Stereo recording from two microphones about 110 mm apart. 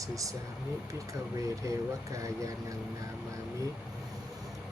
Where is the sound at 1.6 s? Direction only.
30° right (ahead or behind).